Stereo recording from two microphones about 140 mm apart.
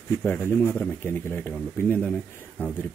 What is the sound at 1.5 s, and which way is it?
Speech, 15° left (ahead or behind).